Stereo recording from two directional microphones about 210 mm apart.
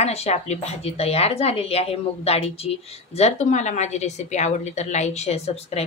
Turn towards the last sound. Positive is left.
turn(degrees=30)  # may be behind; listen again after turning